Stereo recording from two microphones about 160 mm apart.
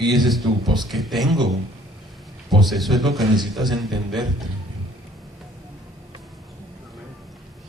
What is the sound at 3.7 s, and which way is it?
Speech, 25° right (ahead or behind).